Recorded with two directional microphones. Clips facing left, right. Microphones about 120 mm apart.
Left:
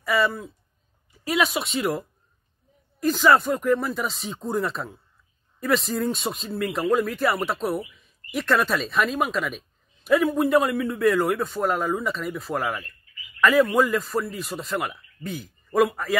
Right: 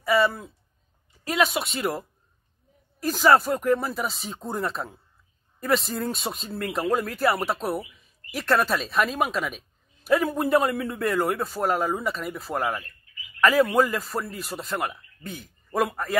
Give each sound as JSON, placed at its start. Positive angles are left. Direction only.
{"t": 0.0, "sound": "a woman's voice", "side_deg": 0}